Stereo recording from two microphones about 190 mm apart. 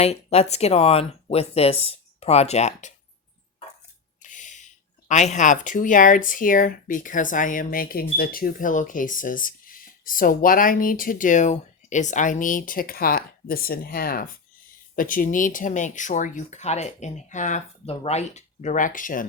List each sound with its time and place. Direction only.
0.0 s speech: 35° left (ahead or behind)
4.2 s speech: 40° left (ahead or behind)